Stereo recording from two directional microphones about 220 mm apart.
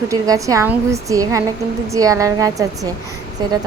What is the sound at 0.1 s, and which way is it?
Speech, 15° right (ahead or behind).